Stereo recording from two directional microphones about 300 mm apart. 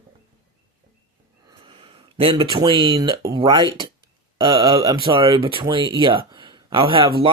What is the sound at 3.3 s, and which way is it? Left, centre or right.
Speech, centre.